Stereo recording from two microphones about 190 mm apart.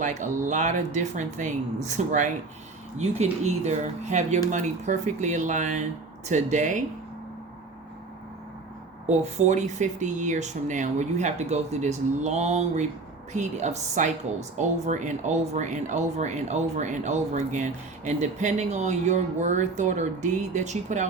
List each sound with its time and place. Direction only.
0.0 s a woman's voice: 40° right (ahead or behind)
9.0 s a woman's voice: 35° right (ahead or behind)